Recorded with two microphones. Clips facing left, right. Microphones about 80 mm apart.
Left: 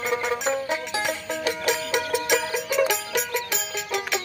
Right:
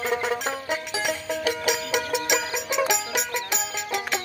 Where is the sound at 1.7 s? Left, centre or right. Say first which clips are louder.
Left 3 dB; centre.